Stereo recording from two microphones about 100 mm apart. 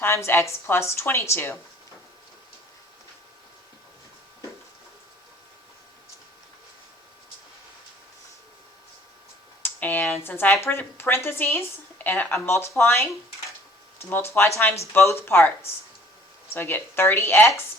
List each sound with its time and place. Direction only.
0.0 s speech: 20° left (ahead or behind)
9.6 s speech: 20° left (ahead or behind)